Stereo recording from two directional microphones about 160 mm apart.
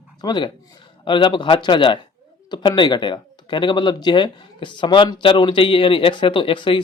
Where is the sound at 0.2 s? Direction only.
30° left (ahead or behind).